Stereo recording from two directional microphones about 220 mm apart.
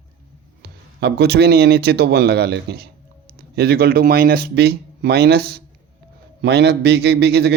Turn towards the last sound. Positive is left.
turn(degrees=-50)  # may be behind; listen again after turning